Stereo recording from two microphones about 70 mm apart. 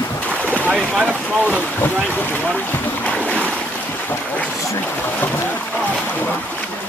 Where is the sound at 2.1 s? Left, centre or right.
Left.